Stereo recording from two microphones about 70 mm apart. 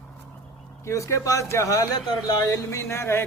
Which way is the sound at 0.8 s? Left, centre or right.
Left.